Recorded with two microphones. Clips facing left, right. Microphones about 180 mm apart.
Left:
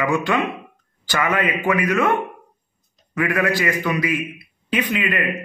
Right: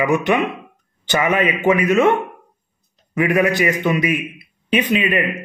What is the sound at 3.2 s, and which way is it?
A man's voice, 20° right (ahead or behind).